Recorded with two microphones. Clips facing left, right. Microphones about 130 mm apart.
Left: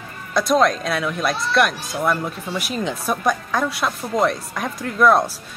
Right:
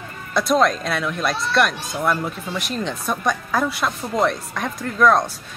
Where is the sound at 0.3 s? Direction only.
Centre (ahead or behind).